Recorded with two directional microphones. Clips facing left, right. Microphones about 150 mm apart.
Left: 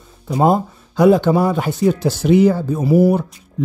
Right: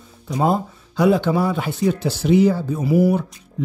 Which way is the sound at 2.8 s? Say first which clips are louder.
Left 4 dB; 30° left (ahead or behind).